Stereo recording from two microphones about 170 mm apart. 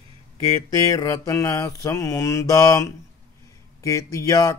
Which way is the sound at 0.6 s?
20° left (ahead or behind).